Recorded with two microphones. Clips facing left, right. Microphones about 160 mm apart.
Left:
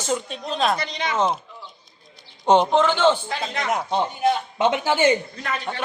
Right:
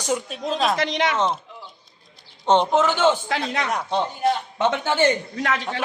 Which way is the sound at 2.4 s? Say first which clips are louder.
Left 2 dB; 10° left (ahead or behind).